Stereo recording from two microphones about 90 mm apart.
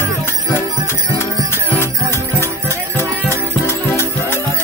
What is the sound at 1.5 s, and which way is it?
Music, 25° left (ahead or behind).